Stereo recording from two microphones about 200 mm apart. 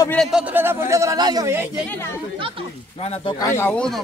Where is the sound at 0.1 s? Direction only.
Centre (ahead or behind).